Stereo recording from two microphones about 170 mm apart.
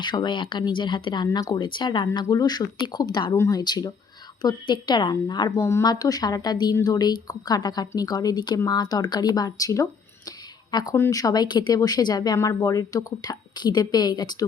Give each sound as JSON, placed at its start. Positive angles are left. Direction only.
{"t": 0.0, "sound": "speech", "side_deg": 25}